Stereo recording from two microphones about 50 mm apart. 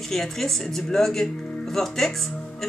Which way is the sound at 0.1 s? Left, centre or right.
Centre.